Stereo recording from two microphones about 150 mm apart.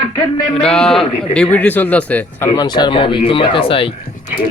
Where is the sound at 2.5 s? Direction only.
25° left (ahead or behind).